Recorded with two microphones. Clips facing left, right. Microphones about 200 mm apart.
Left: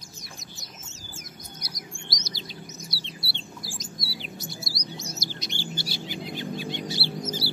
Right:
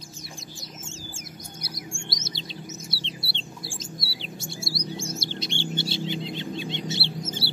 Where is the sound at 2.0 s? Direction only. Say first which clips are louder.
Right 2 dB; 25° right (ahead or behind).